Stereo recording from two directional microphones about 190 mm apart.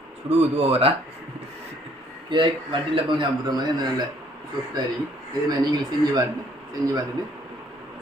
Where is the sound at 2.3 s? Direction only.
25° right (ahead or behind).